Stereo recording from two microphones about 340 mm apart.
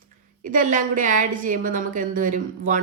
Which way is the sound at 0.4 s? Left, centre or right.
Right.